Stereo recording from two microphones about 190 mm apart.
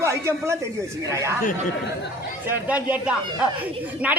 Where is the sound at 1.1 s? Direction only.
15° right (ahead or behind).